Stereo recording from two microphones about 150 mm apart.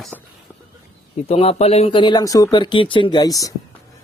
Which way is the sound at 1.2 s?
40° left (ahead or behind).